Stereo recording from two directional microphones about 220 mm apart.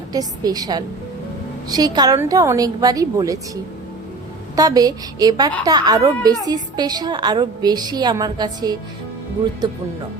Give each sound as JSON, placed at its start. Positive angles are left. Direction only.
{"t": 0.1, "sound": "a woman's voice", "side_deg": -15}